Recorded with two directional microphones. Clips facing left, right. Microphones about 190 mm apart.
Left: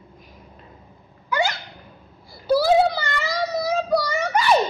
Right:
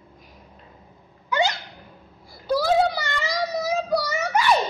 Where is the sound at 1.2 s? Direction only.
20° right (ahead or behind).